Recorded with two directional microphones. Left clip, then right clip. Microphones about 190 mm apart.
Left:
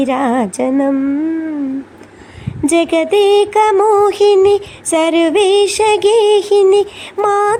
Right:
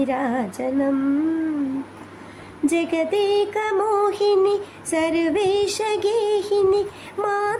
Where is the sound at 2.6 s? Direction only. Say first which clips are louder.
Left 8 dB; 25° left (ahead or behind).